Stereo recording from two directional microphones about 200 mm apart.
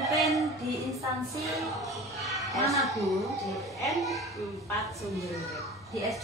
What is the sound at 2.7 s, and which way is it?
Speech, centre (ahead or behind).